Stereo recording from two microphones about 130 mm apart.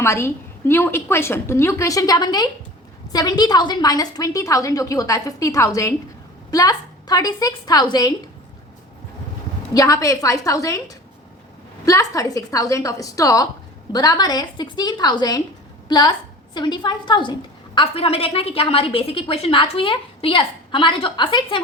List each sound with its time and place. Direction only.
0.0 s a woman's voice: 20° left (ahead or behind)
9.7 s a woman's voice: 25° left (ahead or behind)
17.7 s a woman's voice: 50° left (ahead or behind)